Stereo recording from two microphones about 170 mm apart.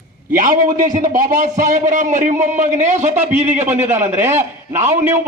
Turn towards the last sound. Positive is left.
turn(degrees=-10)  # may be behind; listen again after turning